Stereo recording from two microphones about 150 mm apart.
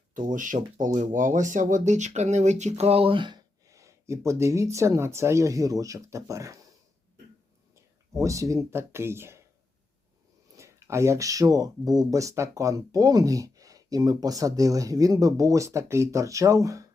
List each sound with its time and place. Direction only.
0.1 s speech: 60° right (ahead or behind); by 6.7 s 20° right (ahead or behind)
8.1 s speech: 20° right (ahead or behind)
10.5 s speech: 20° right (ahead or behind)